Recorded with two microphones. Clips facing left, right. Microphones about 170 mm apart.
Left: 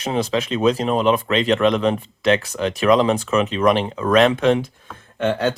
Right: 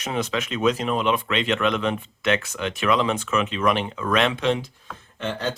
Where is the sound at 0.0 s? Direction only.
30° left (ahead or behind); by 4.6 s 50° left (ahead or behind).